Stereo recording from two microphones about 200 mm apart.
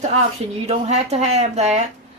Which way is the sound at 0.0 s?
35° right (ahead or behind).